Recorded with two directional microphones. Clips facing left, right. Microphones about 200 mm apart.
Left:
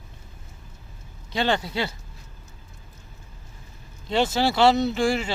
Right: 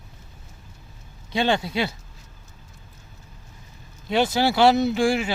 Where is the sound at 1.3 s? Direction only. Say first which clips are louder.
Right 2 dB; 15° right (ahead or behind).